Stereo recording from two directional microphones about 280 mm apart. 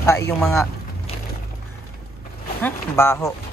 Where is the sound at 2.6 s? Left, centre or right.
Centre.